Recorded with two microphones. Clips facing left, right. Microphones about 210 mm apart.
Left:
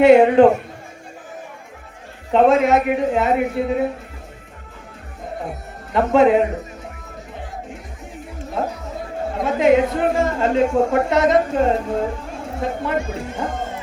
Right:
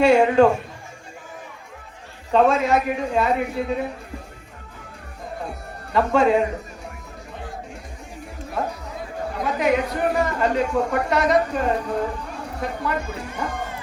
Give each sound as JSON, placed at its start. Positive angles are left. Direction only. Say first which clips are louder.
{"t": 0.0, "sound": "speech", "louder": "left 5 dB", "side_deg": 20}
{"t": 2.3, "sound": "speech", "louder": "left 4 dB", "side_deg": 20}
{"t": 5.5, "sound": "speech", "louder": "left 3 dB", "side_deg": 20}
{"t": 9.3, "sound": "speech", "louder": "left 6 dB", "side_deg": 25}